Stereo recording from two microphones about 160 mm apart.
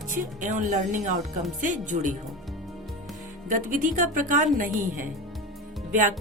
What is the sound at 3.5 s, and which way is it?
A woman's voice, 55° right (ahead or behind).